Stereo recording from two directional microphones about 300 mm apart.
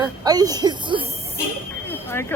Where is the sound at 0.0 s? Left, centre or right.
Centre.